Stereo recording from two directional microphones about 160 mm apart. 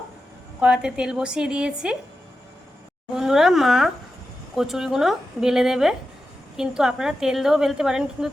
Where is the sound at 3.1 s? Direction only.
Centre (ahead or behind).